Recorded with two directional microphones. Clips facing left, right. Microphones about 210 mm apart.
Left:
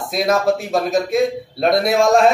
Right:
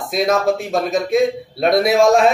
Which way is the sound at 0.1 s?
Centre (ahead or behind).